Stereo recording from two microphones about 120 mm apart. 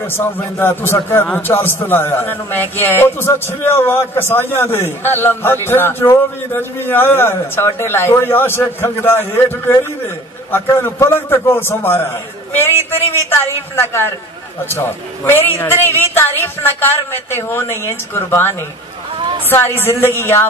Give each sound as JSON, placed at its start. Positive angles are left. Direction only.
{"t": 0.0, "sound": "a man's voice", "side_deg": 20}
{"t": 19.1, "sound": "a sound", "side_deg": -40}
{"t": 19.5, "sound": "a man's voice", "side_deg": 20}